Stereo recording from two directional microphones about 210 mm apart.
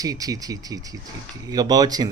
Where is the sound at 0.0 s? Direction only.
15° right (ahead or behind).